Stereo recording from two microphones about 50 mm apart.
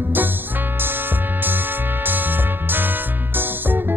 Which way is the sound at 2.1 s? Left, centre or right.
Right.